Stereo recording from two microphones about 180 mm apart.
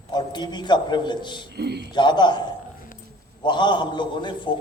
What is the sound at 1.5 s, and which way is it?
Speech, 65° right (ahead or behind).